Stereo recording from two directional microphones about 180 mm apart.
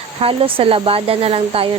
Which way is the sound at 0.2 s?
30° right (ahead or behind).